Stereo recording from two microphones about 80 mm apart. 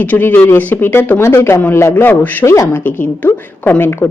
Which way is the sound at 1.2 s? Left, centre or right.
Left.